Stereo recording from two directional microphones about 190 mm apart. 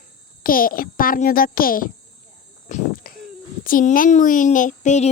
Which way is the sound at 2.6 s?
40° left (ahead or behind).